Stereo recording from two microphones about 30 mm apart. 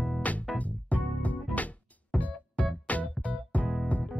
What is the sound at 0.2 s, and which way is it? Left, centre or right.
Music, left.